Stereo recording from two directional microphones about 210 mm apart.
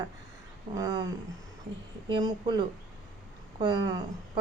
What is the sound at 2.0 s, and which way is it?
A woman's voice, 20° right (ahead or behind).